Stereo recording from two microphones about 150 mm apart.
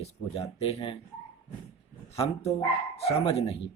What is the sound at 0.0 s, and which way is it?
Speech, 40° left (ahead or behind).